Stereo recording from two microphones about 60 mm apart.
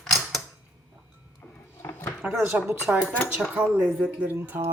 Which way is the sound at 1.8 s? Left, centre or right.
Left.